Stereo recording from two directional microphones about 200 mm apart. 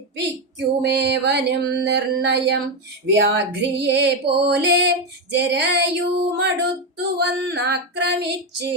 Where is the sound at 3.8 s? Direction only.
60° right (ahead or behind).